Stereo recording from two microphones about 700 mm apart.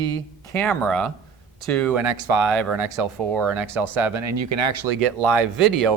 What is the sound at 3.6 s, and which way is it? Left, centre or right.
Speech, right.